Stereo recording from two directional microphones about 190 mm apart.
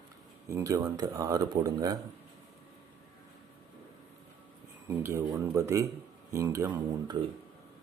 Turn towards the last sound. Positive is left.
turn(degrees=-15)  # may be behind; listen again after turning